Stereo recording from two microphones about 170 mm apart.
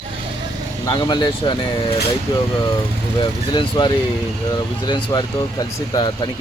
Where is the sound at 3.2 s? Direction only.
25° left (ahead or behind).